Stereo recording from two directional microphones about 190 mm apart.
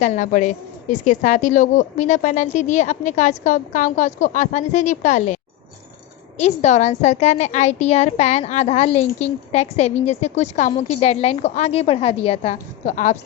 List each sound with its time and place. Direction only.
0.0 s a woman's voice: 40° left (ahead or behind)
6.4 s a woman's voice: 35° left (ahead or behind)